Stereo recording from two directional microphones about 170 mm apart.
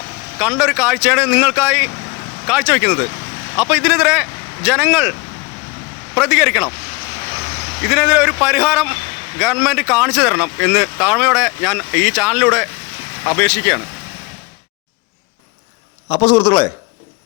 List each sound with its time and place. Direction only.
0.3 s speech: 5° right (ahead or behind)
6.1 s speech: 5° right (ahead or behind)
7.9 s a man's voice: 5° right (ahead or behind)
16.0 s a man's voice: 15° left (ahead or behind)